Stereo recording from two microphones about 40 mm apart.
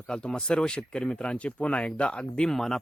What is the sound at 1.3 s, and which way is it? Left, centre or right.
Speech, left.